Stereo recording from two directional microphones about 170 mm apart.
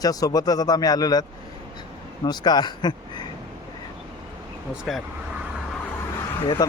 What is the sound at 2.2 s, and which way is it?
Speech, 25° left (ahead or behind).